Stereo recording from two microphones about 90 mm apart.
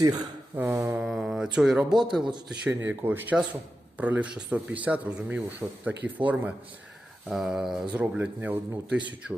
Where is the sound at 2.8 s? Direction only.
25° right (ahead or behind).